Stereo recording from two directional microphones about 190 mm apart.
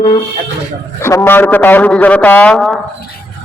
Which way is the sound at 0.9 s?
15° left (ahead or behind).